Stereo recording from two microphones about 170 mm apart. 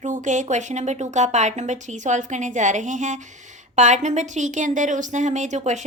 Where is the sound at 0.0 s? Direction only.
45° right (ahead or behind).